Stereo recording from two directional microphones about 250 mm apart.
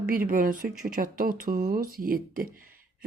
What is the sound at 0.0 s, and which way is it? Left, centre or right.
A woman's voice, right.